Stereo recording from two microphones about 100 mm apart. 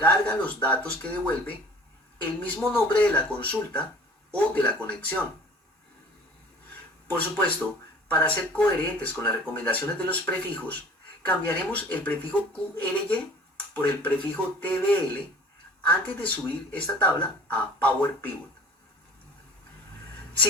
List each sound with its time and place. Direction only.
0.4 s speech: 15° left (ahead or behind)
6.7 s speech: 15° left (ahead or behind)